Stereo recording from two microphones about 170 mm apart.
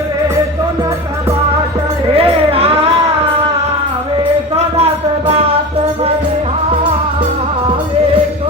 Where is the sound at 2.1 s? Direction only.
35° right (ahead or behind).